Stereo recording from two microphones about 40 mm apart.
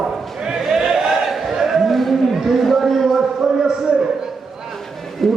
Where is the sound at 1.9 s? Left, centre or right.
Centre.